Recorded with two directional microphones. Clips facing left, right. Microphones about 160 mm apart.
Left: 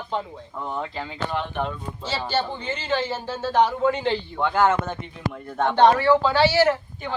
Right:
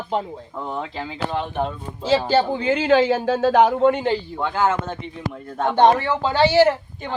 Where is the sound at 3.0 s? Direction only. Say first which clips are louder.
Right 9 dB; 65° right (ahead or behind).